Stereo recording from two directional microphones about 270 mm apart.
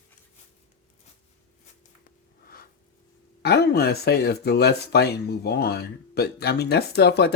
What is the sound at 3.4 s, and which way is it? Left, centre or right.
Speech, left.